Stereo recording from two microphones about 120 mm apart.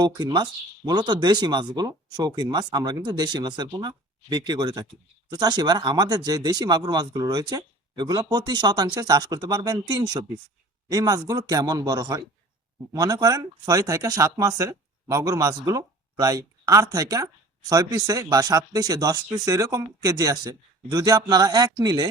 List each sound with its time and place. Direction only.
0.0 s speech: 35° right (ahead or behind)